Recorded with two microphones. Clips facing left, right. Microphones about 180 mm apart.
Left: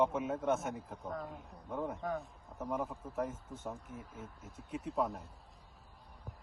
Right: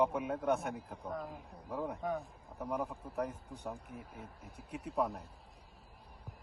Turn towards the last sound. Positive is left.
turn(degrees=0)  # may be behind; listen again after turning